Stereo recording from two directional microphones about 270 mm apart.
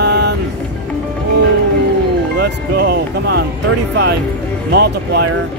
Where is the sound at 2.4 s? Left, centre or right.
Right.